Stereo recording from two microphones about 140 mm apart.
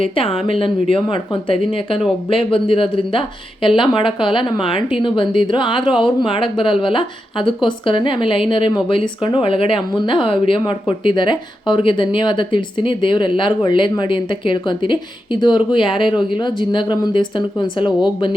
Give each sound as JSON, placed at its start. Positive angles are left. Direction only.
{"t": 0.0, "sound": "a woman's voice", "side_deg": 40}